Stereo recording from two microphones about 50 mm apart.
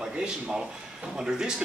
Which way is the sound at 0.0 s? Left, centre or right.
Centre.